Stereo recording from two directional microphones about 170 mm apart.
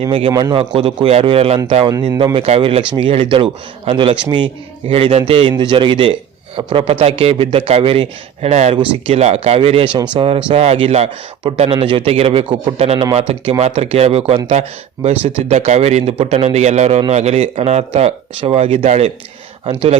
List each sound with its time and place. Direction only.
0.0 s a man's voice: 30° right (ahead or behind)